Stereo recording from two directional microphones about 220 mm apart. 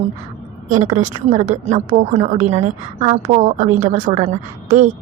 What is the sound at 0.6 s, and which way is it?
A woman's voice, 35° right (ahead or behind).